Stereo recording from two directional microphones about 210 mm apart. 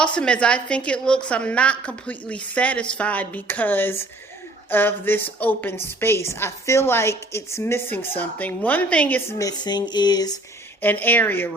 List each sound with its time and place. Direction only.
0.0 s a woman's voice: 5° left (ahead or behind)
9.5 s a sound: 20° left (ahead or behind)
10.8 s a woman's voice: 10° left (ahead or behind)